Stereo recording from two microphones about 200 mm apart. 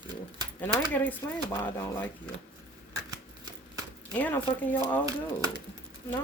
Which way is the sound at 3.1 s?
20° right (ahead or behind).